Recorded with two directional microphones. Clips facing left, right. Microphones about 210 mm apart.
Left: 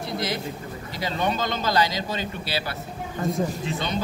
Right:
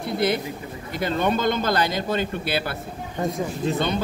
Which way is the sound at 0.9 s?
55° right (ahead or behind).